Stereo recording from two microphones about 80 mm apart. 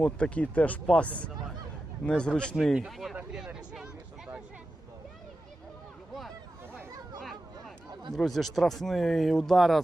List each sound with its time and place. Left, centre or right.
0.0 s speech: centre
2.7 s speech: centre
3.3 s a sound: centre
8.1 s speech: centre